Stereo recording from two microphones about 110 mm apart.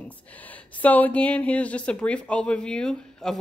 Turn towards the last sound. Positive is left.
turn(degrees=5)  # may be behind; listen again after turning